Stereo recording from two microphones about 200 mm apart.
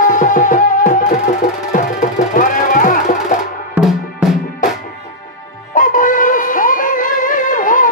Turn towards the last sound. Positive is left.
turn(degrees=40)  # may be behind; listen again after turning